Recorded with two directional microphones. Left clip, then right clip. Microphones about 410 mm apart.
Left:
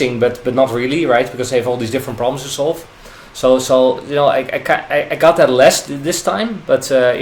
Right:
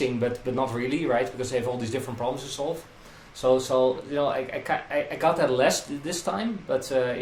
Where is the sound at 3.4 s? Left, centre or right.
Left.